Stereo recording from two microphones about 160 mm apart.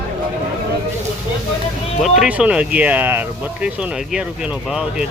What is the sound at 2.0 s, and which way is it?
Speech, centre (ahead or behind).